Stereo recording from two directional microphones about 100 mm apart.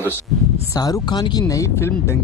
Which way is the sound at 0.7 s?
40° left (ahead or behind).